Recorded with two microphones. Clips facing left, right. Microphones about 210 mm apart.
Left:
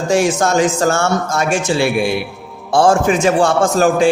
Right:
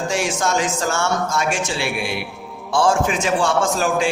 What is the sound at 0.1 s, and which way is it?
A man's voice, 45° left (ahead or behind).